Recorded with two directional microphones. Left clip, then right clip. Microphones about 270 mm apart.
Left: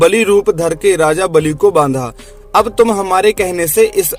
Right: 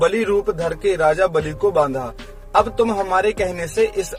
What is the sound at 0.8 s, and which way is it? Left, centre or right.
A man's voice, left.